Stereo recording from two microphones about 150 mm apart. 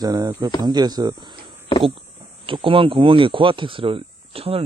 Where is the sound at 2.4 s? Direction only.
35° right (ahead or behind).